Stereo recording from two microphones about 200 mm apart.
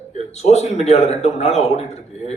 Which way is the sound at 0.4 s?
30° left (ahead or behind).